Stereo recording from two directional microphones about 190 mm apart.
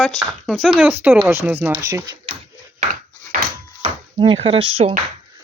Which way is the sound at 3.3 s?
45° right (ahead or behind).